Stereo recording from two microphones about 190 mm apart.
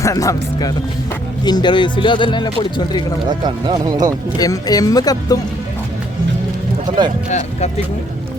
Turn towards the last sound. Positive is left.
turn(degrees=40)  # may be behind; listen again after turning